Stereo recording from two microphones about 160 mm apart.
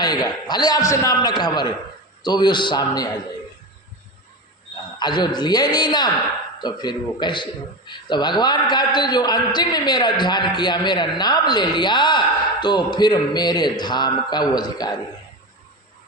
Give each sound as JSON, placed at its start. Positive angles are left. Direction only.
{"t": 0.0, "sound": "a man's voice", "side_deg": 25}
{"t": 4.9, "sound": "a man's voice", "side_deg": 25}